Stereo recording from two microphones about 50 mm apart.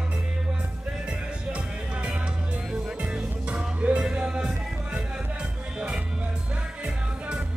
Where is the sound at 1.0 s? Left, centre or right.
Right.